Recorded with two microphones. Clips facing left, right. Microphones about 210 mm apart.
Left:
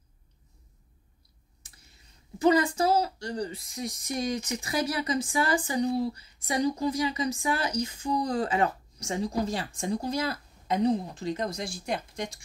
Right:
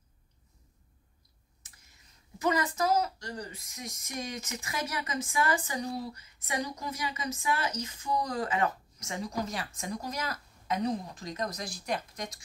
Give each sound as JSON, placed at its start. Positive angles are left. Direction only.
{"t": 2.3, "sound": "a woman's voice", "side_deg": 30}